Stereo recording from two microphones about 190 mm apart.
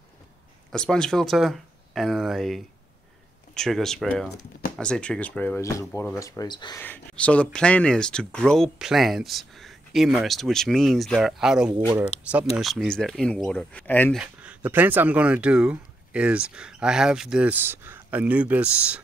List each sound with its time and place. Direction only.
0.7 s speech: 5° left (ahead or behind); by 6.8 s 25° left (ahead or behind)
6.8 s speech: 10° left (ahead or behind)
14.2 s speech: 5° right (ahead or behind)